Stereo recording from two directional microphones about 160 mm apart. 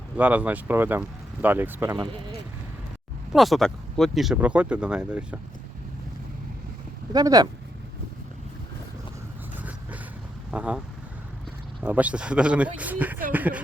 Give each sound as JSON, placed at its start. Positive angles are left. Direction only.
{"t": 0.2, "sound": "speech", "side_deg": -10}
{"t": 3.3, "sound": "speech", "side_deg": 0}
{"t": 7.1, "sound": "speech", "side_deg": -25}
{"t": 10.5, "sound": "speech", "side_deg": -10}
{"t": 11.8, "sound": "speech", "side_deg": -10}